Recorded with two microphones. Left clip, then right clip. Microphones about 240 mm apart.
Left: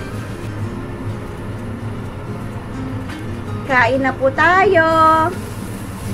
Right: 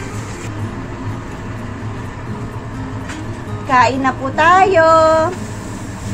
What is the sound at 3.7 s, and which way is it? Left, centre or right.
A woman's voice, centre.